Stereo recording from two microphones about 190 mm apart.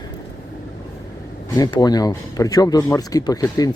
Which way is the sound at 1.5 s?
20° left (ahead or behind).